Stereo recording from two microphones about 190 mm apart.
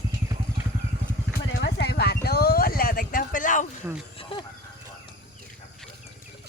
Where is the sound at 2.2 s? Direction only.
55° left (ahead or behind).